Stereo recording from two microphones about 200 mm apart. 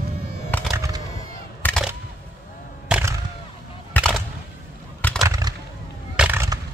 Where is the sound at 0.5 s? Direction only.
10° left (ahead or behind).